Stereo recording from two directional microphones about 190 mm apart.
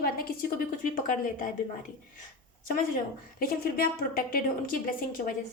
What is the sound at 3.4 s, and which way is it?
A woman's voice, 50° left (ahead or behind).